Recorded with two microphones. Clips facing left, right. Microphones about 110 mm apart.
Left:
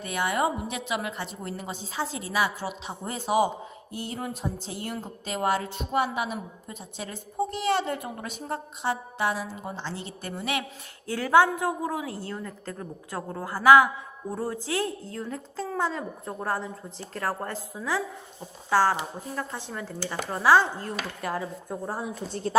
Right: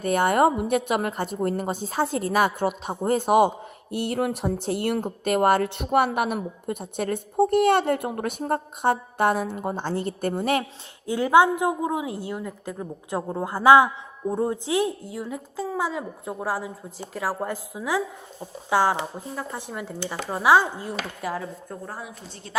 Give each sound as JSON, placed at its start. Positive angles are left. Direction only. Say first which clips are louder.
{"t": 0.0, "sound": "a woman's voice", "louder": "right 7 dB", "side_deg": -50}
{"t": 3.9, "sound": "speech", "louder": "right 9 dB", "side_deg": -65}
{"t": 11.0, "sound": "a woman's voice", "louder": "right 3 dB", "side_deg": -20}
{"t": 21.7, "sound": "a woman's voice", "louder": "left 3 dB", "side_deg": 15}